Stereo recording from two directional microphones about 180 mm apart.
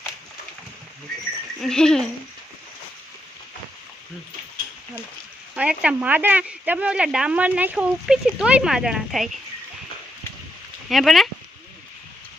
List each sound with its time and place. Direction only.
1.6 s speech: 5° left (ahead or behind)
5.5 s speech: 5° right (ahead or behind)
10.8 s speech: centre (ahead or behind)